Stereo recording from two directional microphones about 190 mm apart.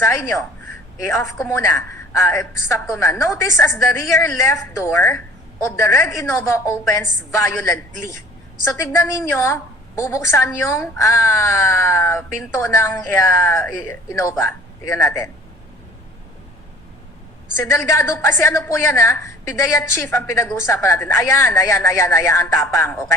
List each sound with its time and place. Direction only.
0.0 s a woman's voice: 15° left (ahead or behind)
9.3 s a woman's voice: 15° left (ahead or behind)
17.6 s a woman's voice: 15° left (ahead or behind)